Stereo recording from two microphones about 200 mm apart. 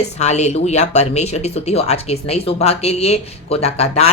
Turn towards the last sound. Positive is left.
turn(degrees=30)  # may be behind; listen again after turning